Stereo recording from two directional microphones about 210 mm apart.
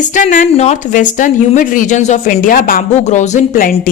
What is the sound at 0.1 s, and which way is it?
Speech, 35° left (ahead or behind).